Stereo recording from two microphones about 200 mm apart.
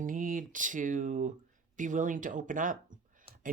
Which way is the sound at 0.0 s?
40° right (ahead or behind).